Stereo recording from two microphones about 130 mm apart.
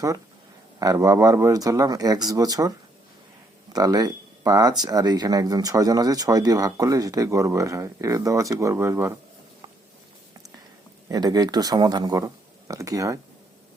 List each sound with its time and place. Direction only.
0.8 s speech: 25° right (ahead or behind)
11.1 s speech: 30° right (ahead or behind)